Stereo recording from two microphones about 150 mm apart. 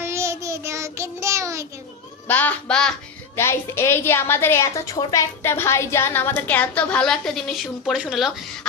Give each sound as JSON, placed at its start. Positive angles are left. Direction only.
{"t": 0.0, "sound": "child singing", "side_deg": -20}
{"t": 2.2, "sound": "a woman's voice", "side_deg": 10}
{"t": 3.3, "sound": "a woman's voice", "side_deg": 15}